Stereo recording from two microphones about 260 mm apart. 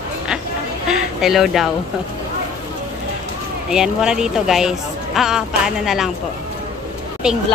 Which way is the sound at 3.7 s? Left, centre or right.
Centre.